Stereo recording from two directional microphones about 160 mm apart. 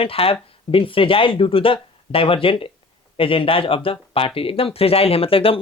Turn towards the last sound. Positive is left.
turn(degrees=35)  # may be behind; listen again after turning